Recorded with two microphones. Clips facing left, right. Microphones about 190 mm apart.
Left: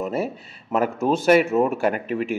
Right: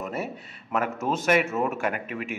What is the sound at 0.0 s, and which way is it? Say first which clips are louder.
Speech: left 6 dB; 30° left (ahead or behind).